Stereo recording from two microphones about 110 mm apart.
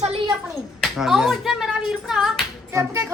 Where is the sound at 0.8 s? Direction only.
5° right (ahead or behind).